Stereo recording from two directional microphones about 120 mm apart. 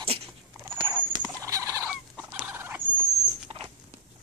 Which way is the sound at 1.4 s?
30° right (ahead or behind).